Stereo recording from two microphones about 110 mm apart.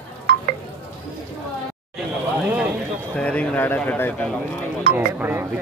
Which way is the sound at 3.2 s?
10° left (ahead or behind).